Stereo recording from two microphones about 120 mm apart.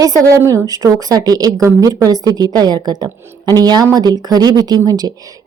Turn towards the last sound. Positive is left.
turn(degrees=-35)  # may be behind; listen again after turning